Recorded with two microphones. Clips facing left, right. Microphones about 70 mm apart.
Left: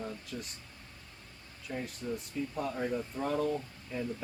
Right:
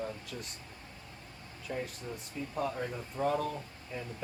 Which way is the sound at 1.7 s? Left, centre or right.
Centre.